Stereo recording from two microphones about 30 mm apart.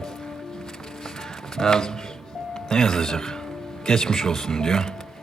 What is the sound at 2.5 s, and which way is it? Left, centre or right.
Speech, centre.